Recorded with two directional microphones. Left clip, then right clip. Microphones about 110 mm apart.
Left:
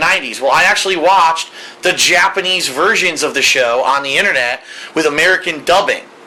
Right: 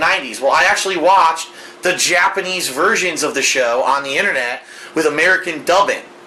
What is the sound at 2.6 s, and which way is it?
Speech, 15° left (ahead or behind).